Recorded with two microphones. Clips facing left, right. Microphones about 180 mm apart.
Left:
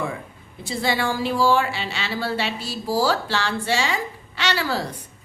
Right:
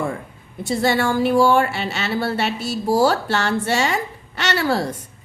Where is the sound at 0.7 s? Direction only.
50° right (ahead or behind).